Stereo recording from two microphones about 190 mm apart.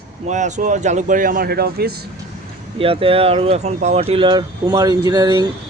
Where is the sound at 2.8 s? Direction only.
30° right (ahead or behind).